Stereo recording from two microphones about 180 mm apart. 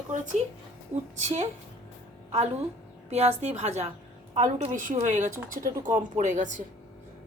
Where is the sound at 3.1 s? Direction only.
35° right (ahead or behind).